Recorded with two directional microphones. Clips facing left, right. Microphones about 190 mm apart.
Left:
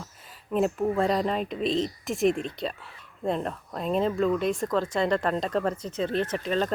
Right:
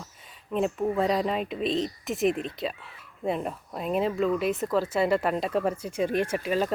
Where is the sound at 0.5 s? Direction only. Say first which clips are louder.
Left 1 dB; centre (ahead or behind).